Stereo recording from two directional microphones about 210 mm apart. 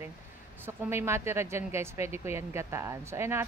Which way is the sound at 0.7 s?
10° right (ahead or behind).